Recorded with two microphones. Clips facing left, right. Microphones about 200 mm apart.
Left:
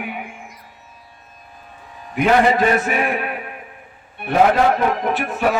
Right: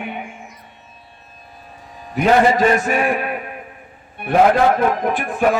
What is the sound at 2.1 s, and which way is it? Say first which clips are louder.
A man's voice: right 1 dB; 45° right (ahead or behind).